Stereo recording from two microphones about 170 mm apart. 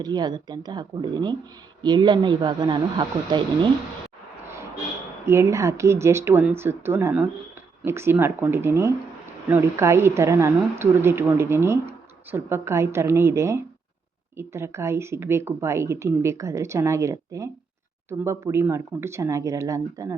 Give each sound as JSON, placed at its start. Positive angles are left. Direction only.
{"t": 0.0, "sound": "speech", "side_deg": -25}
{"t": 5.2, "sound": "speech", "side_deg": -15}